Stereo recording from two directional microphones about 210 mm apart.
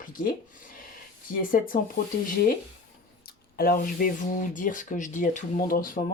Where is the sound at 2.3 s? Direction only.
45° left (ahead or behind).